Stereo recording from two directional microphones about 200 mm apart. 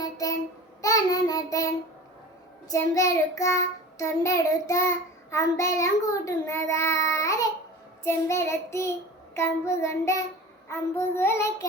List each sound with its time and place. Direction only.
0.0 s child singing: 15° left (ahead or behind)